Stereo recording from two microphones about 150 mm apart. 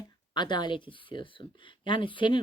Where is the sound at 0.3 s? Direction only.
30° left (ahead or behind).